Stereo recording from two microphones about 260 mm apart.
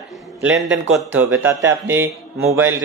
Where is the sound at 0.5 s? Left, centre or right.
Right.